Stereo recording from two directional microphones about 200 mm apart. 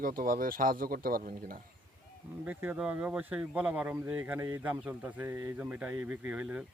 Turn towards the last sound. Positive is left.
turn(degrees=-5)  # may be behind; listen again after turning